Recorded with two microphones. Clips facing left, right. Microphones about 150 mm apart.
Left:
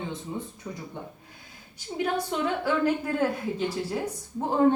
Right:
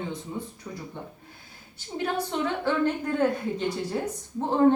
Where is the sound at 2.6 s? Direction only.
5° left (ahead or behind).